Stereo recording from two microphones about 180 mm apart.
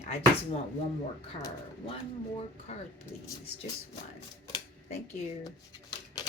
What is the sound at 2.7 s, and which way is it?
Speech, 40° left (ahead or behind).